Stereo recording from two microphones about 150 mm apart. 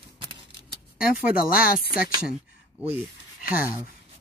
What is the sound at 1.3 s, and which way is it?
Speech, 75° left (ahead or behind).